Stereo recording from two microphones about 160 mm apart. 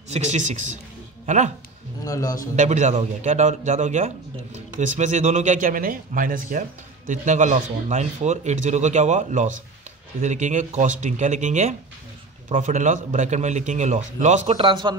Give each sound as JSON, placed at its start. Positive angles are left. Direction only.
{"t": 1.2, "sound": "speech", "side_deg": -45}
{"t": 2.0, "sound": "a man's voice", "side_deg": 20}
{"t": 2.5, "sound": "speech", "side_deg": -45}
{"t": 14.6, "sound": "a man's voice", "side_deg": -30}